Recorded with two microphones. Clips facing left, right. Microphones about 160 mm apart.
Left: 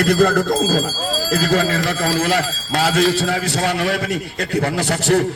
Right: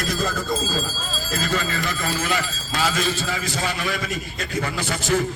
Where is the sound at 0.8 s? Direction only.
75° left (ahead or behind).